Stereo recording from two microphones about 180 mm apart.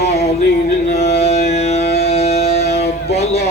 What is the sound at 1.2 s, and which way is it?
Music, 35° left (ahead or behind).